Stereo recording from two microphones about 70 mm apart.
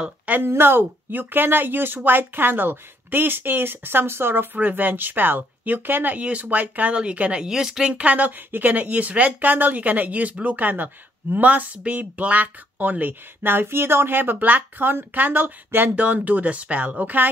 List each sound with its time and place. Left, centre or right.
0.3 s a woman's voice: right